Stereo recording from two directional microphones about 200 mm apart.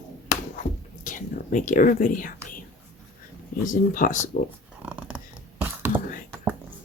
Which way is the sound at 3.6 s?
40° left (ahead or behind).